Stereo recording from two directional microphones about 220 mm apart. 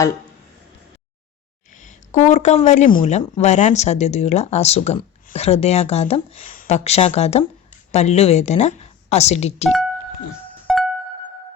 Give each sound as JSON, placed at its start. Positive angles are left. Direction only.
{"t": 1.7, "sound": "a sound", "side_deg": 35}
{"t": 3.0, "sound": "speech", "side_deg": 30}
{"t": 10.7, "sound": "music", "side_deg": 0}